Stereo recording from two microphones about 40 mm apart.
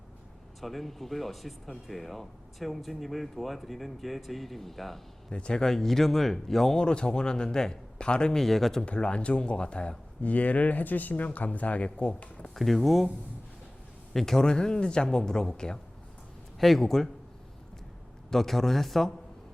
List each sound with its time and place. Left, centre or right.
0.6 s speech: centre
5.3 s speech: left
5.6 s speech: centre
6.7 s speech: left
8.4 s speech: centre
8.8 s speech: left
10.2 s speech: left
12.5 s speech: centre
14.1 s speech: centre
16.6 s speech: centre
18.3 s speech: centre